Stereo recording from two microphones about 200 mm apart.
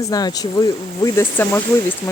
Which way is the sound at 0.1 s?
20° left (ahead or behind).